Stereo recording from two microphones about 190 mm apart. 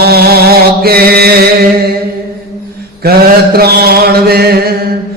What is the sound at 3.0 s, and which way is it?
Mantra, 55° right (ahead or behind).